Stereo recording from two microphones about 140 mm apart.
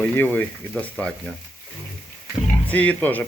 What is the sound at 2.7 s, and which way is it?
Speech, 10° left (ahead or behind).